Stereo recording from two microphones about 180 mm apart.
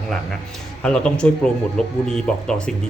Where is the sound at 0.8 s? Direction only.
5° left (ahead or behind).